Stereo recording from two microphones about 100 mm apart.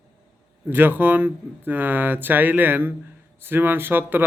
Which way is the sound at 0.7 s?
20° right (ahead or behind).